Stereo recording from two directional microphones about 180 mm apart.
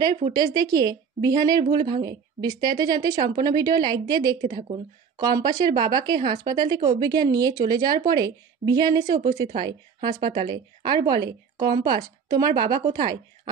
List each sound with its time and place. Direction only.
0.3 s speech: 20° right (ahead or behind)